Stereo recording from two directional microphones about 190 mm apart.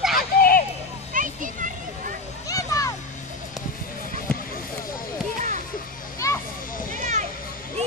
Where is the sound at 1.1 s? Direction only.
45° right (ahead or behind).